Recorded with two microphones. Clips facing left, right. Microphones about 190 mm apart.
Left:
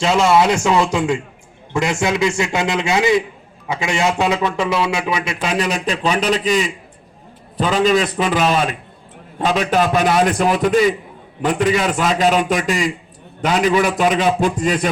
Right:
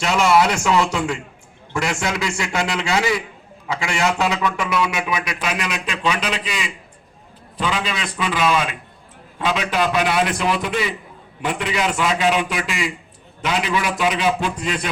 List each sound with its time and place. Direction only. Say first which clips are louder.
0.0 s a man's voice: left 3 dB; 25° left (ahead or behind); by 14.8 s 45° left (ahead or behind)